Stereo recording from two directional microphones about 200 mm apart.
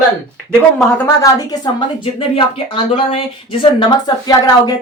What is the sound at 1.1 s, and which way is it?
A woman's voice, 15° left (ahead or behind).